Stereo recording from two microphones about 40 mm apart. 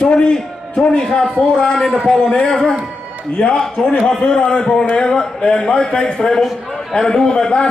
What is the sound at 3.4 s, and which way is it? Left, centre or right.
Speech, left.